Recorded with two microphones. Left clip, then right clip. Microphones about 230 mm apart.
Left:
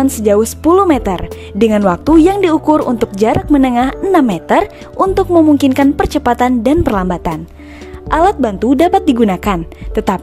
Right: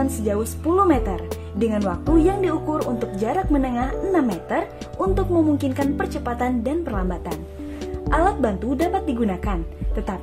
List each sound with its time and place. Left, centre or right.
0.0 s speech: left